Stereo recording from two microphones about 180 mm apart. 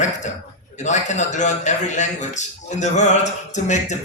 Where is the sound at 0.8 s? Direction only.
40° left (ahead or behind).